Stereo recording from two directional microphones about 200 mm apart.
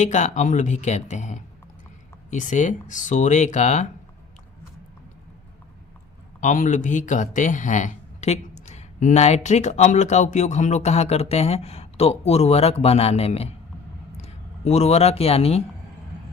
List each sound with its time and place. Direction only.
0.0 s speech: 35° left (ahead or behind)
6.4 s speech: 40° left (ahead or behind)